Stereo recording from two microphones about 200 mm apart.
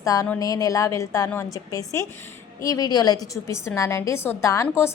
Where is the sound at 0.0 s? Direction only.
15° left (ahead or behind).